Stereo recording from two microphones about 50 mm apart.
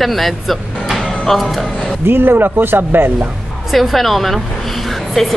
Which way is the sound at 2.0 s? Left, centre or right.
Right.